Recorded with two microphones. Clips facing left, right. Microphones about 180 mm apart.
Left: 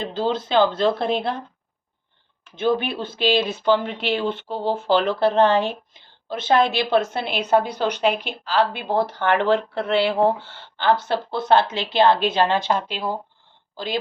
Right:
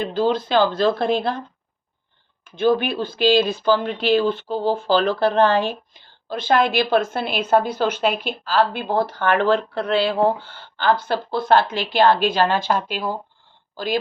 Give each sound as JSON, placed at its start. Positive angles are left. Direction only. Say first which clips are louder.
{"t": 0.0, "sound": "speech", "louder": "right 3 dB", "side_deg": 25}
{"t": 2.6, "sound": "speech", "louder": "right 3 dB", "side_deg": 25}